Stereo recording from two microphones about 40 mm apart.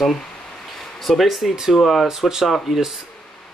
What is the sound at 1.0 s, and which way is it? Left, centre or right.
Speech, centre.